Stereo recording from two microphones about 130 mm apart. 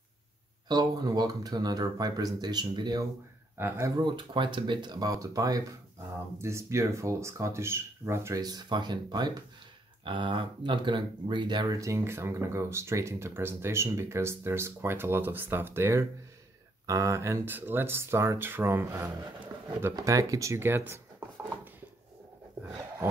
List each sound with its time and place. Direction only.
0.7 s speech: 30° right (ahead or behind)
3.5 s speech: 15° right (ahead or behind)
4.0 s speech: 40° right (ahead or behind); by 21.5 s 15° right (ahead or behind)